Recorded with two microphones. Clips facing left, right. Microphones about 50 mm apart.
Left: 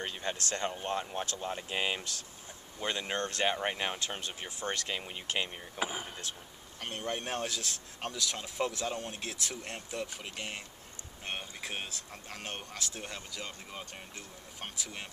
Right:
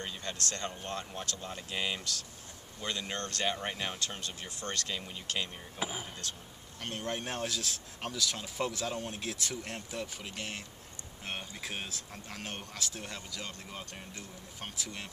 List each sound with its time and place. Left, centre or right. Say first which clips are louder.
0.0 s speech: left 2 dB; left
6.8 s speech: even; centre